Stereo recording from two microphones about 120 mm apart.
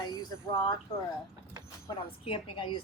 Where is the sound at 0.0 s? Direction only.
35° left (ahead or behind).